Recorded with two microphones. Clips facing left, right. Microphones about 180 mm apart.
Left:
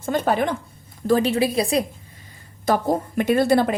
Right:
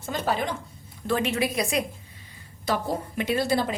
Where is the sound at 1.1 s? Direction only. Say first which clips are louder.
Left 6 dB; 35° left (ahead or behind).